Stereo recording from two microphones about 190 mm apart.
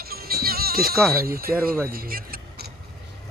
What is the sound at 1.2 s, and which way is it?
Speech, 50° right (ahead or behind).